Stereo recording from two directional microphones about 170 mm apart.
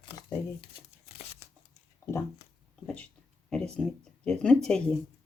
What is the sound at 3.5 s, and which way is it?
Speech, 5° left (ahead or behind).